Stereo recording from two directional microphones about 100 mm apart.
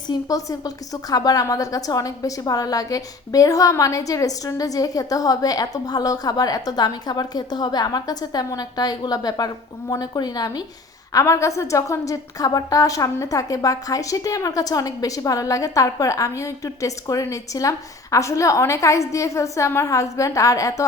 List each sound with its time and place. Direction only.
0.1 s a woman's voice: 35° left (ahead or behind)
11.1 s a woman's voice: 30° left (ahead or behind)